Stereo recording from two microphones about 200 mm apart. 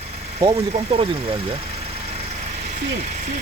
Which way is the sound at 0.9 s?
25° right (ahead or behind).